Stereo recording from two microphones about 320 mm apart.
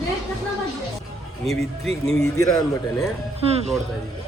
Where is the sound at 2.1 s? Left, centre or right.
Centre.